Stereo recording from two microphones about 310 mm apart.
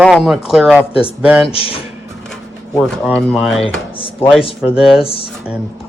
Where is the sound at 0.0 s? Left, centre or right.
Centre.